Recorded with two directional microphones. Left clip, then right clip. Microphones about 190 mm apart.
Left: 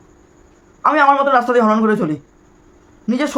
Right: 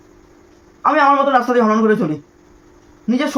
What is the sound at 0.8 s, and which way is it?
A woman's voice, 20° left (ahead or behind).